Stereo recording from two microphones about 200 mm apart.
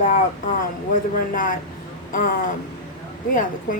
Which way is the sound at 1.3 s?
40° left (ahead or behind).